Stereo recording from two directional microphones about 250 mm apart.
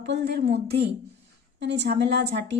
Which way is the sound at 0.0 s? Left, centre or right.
Right.